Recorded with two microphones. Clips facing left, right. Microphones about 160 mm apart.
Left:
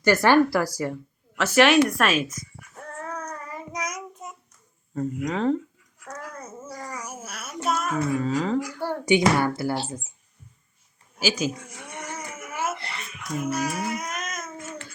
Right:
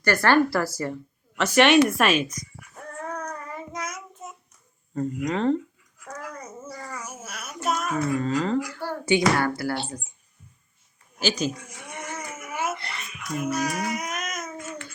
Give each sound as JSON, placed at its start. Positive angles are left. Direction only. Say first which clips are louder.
{"t": 0.0, "sound": "a woman's voice", "louder": "left 2 dB", "side_deg": 20}
{"t": 3.0, "sound": "child singing", "louder": "right 2 dB", "side_deg": 5}
{"t": 4.9, "sound": "a woman's voice", "louder": "right 1 dB", "side_deg": 5}
{"t": 6.1, "sound": "child singing", "louder": "right 1 dB", "side_deg": 5}
{"t": 7.9, "sound": "a woman's voice", "louder": "even", "side_deg": 5}
{"t": 11.2, "sound": "speech", "louder": "even", "side_deg": 10}
{"t": 12.0, "sound": "a sound", "louder": "right 1 dB", "side_deg": 10}
{"t": 13.5, "sound": "child singing", "louder": "right 1 dB", "side_deg": 5}